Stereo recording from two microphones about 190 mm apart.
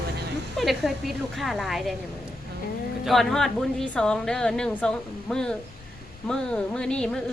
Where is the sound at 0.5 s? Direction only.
Centre (ahead or behind).